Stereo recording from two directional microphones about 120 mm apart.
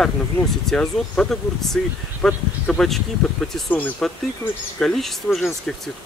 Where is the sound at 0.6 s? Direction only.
5° left (ahead or behind).